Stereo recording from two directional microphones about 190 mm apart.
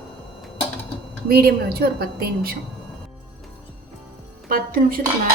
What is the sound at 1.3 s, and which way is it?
A woman's voice, 55° right (ahead or behind).